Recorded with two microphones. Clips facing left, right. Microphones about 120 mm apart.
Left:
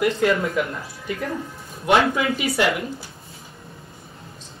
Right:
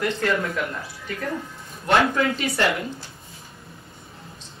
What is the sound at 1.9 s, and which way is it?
Speech, 5° left (ahead or behind).